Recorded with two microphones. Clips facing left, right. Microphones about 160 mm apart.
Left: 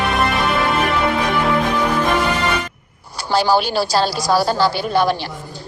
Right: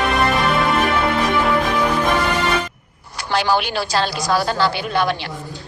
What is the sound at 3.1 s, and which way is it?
A woman's voice, 35° left (ahead or behind).